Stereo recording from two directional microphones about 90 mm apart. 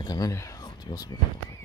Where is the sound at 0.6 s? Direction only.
50° left (ahead or behind).